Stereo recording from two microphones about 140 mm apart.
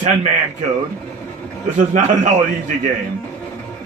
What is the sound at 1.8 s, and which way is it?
Speech, 60° right (ahead or behind).